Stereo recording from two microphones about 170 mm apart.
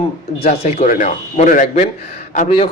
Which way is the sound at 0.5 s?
40° left (ahead or behind).